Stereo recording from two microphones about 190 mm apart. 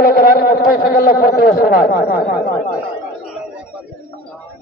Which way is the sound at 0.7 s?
50° left (ahead or behind).